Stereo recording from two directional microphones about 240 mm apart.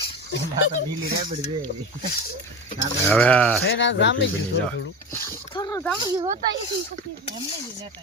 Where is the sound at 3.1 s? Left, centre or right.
Centre.